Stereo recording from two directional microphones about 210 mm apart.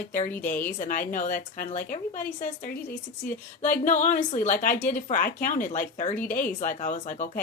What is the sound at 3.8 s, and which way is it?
Speech, 40° left (ahead or behind).